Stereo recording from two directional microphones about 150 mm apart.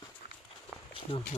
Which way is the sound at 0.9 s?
35° left (ahead or behind).